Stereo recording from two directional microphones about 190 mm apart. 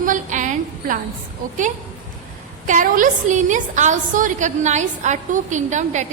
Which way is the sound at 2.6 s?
45° right (ahead or behind).